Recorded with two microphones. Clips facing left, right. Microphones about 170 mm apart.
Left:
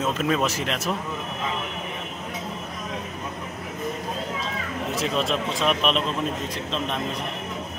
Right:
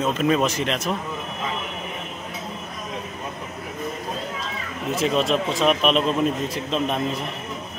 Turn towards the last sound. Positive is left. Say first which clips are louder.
# right 4 dB
turn(degrees=-5)  # may be behind; listen again after turning